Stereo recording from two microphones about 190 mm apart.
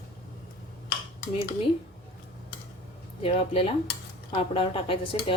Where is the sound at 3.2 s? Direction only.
30° left (ahead or behind).